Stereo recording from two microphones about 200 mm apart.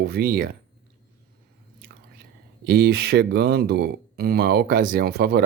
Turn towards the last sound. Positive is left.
turn(degrees=-50)  # may be behind; listen again after turning